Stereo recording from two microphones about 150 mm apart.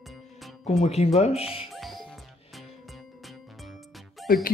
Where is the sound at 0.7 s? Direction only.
45° left (ahead or behind).